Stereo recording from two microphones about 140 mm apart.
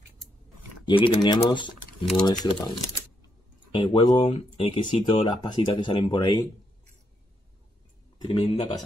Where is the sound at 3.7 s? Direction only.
35° left (ahead or behind).